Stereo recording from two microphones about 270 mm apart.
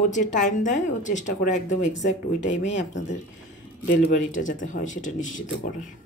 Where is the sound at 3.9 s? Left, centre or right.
Left.